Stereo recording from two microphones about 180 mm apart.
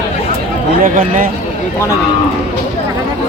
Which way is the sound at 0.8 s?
50° right (ahead or behind).